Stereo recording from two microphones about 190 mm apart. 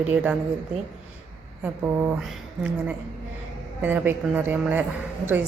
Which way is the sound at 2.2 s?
5° right (ahead or behind).